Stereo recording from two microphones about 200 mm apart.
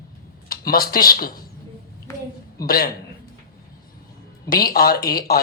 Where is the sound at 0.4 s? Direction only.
50° left (ahead or behind).